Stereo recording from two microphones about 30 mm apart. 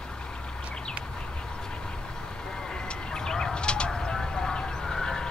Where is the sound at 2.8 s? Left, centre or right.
Left.